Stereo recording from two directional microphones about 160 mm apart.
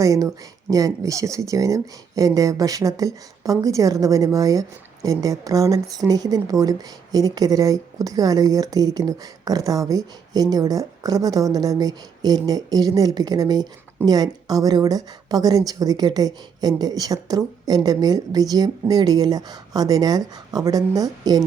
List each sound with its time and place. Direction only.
0.0 s speech: 20° right (ahead or behind)